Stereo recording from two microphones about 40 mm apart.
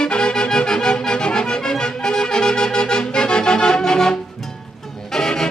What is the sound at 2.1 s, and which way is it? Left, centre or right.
Music, centre.